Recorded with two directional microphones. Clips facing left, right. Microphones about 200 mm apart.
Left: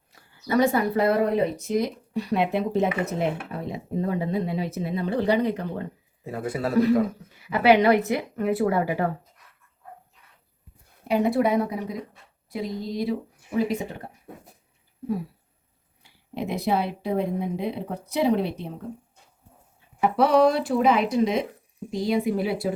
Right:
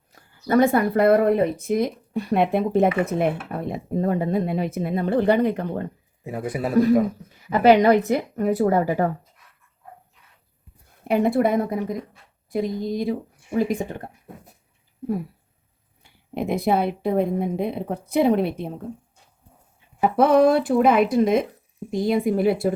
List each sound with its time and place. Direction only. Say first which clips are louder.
0.2 s speech: right 3 dB; 50° right (ahead or behind)
6.2 s speech: right 2 dB; 15° right (ahead or behind)
7.5 s speech: right 3 dB; 45° right (ahead or behind)
11.1 s speech: right 2 dB; 50° right (ahead or behind)
16.0 s speech: right 4 dB; 50° right (ahead or behind)
20.0 s speech: right 2 dB; 50° right (ahead or behind)